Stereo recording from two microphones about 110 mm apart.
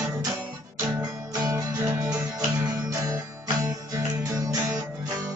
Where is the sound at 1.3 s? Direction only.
30° right (ahead or behind).